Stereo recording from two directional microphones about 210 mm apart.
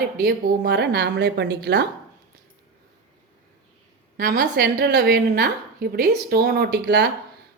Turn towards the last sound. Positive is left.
turn(degrees=-50)  # may be behind; listen again after turning